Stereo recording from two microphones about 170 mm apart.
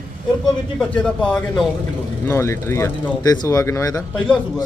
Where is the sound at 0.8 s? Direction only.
5° left (ahead or behind).